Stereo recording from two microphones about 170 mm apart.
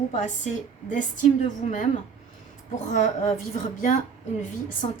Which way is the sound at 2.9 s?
45° left (ahead or behind).